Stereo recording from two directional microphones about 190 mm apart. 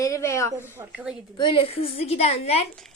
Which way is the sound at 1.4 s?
25° left (ahead or behind).